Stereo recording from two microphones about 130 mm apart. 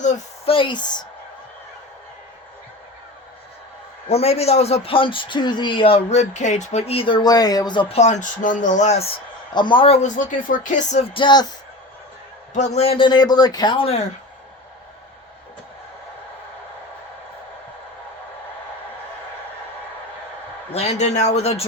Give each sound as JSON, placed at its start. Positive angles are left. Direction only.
{"t": 0.4, "sound": "speech", "side_deg": 40}
{"t": 4.1, "sound": "a man's voice", "side_deg": 55}
{"t": 7.9, "sound": "speech", "side_deg": 60}
{"t": 9.6, "sound": "speech", "side_deg": 40}
{"t": 10.0, "sound": "speech", "side_deg": 90}
{"t": 11.1, "sound": "speech", "side_deg": 35}
{"t": 12.5, "sound": "a man's voice", "side_deg": 60}
{"t": 13.1, "sound": "speech", "side_deg": 30}
{"t": 20.7, "sound": "speech", "side_deg": 60}